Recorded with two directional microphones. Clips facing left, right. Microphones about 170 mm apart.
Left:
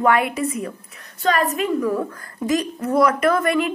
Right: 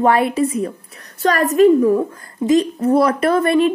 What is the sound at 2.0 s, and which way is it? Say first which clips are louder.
A woman's voice: right 5 dB; 25° right (ahead or behind).